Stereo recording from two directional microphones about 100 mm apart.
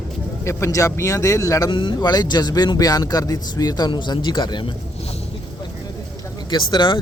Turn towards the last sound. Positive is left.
turn(degrees=50)  # may be behind; listen again after turning